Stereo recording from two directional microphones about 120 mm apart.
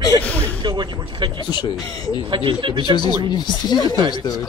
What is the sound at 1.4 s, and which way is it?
Speech, 35° left (ahead or behind).